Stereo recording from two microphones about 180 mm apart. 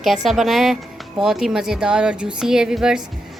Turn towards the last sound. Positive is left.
turn(degrees=-5)  # may be behind; listen again after turning